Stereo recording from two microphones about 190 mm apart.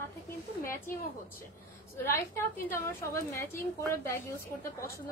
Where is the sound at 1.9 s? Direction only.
15° left (ahead or behind).